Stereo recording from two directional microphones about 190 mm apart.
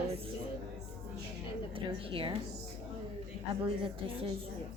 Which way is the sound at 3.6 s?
30° right (ahead or behind).